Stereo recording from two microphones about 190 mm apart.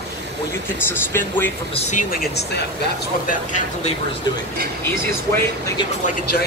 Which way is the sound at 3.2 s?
40° left (ahead or behind).